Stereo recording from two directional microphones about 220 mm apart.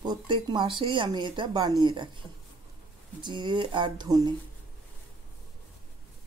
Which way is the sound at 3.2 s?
20° right (ahead or behind).